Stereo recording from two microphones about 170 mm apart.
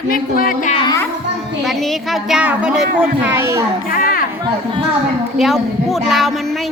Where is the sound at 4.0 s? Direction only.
55° left (ahead or behind).